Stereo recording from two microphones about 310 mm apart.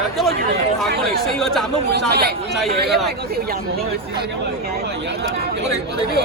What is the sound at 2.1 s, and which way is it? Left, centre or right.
Speech, right.